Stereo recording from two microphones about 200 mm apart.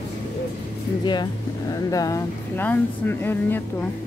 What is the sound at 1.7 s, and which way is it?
Speech, 15° left (ahead or behind).